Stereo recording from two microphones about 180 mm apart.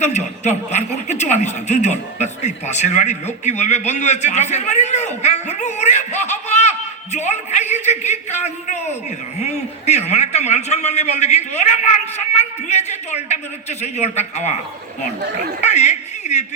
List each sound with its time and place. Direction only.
0.0 s a man's voice: 40° left (ahead or behind)
15.6 s a man's voice: 40° left (ahead or behind)